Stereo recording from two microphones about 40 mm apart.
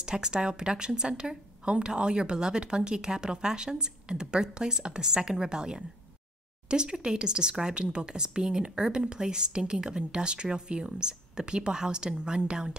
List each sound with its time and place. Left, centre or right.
0.0 s speech: centre